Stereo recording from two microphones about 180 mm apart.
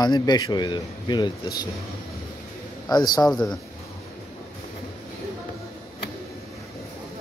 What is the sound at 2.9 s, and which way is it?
Speech, 20° left (ahead or behind).